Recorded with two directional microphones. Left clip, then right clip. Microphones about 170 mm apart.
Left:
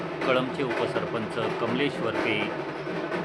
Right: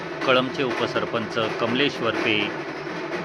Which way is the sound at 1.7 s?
15° right (ahead or behind).